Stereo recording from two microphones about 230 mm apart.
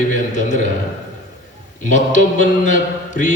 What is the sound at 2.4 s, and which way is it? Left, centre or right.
Mantra, left.